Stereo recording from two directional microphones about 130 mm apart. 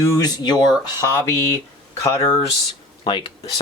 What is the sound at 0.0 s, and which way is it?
Speech, 20° left (ahead or behind).